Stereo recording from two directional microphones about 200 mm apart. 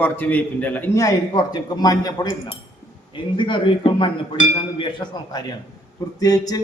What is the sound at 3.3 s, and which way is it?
Cutlery, 25° left (ahead or behind).